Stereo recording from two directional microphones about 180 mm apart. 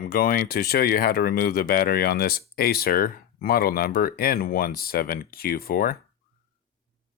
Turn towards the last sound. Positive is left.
turn(degrees=55)  # may be behind; listen again after turning